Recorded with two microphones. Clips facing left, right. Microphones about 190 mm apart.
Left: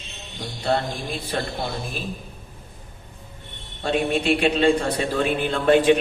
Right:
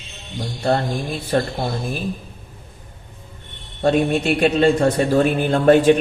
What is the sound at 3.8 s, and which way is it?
A man's voice, 45° right (ahead or behind).